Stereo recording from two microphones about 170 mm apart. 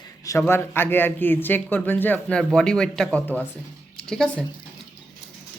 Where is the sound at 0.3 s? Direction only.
15° left (ahead or behind).